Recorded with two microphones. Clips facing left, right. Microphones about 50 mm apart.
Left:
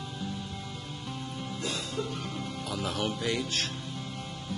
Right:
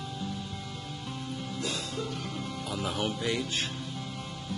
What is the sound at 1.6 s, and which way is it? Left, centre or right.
Music, left.